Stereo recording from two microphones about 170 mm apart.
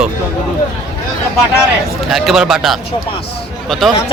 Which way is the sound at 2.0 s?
Centre (ahead or behind).